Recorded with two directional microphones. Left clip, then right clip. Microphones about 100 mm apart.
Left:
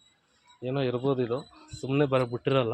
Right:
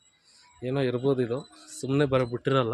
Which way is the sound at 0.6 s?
50° right (ahead or behind).